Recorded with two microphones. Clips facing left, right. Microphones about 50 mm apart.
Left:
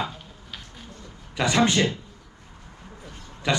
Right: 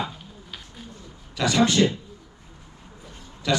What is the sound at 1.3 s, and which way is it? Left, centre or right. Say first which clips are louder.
Speech: even; left.